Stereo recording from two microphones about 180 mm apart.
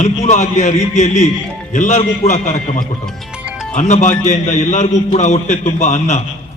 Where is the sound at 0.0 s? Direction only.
40° left (ahead or behind).